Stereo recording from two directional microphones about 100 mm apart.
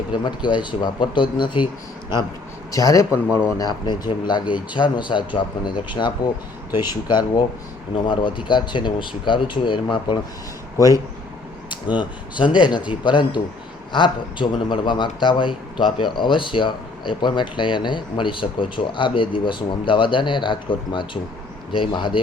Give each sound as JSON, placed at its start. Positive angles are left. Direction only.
{"t": 0.1, "sound": "a man's voice", "side_deg": 50}
{"t": 2.7, "sound": "a man's voice", "side_deg": 35}
{"t": 10.8, "sound": "speech", "side_deg": 35}
{"t": 11.7, "sound": "a man's voice", "side_deg": 50}